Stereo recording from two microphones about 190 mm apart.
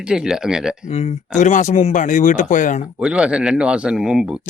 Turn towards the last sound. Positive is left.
turn(degrees=-5)  # may be behind; listen again after turning